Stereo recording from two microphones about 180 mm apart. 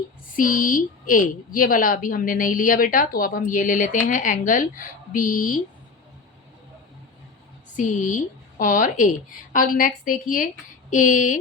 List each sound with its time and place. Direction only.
0.3 s a woman's voice: 50° left (ahead or behind)
7.8 s a woman's voice: 45° left (ahead or behind)